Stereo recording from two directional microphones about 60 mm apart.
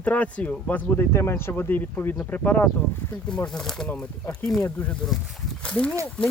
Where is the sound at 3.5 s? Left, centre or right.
Centre.